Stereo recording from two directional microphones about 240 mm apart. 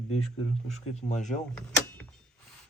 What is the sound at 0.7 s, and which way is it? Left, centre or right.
Speech, left.